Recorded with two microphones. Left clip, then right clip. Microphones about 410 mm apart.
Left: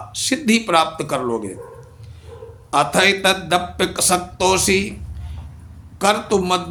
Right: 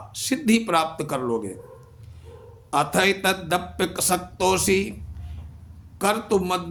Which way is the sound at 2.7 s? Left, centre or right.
Right.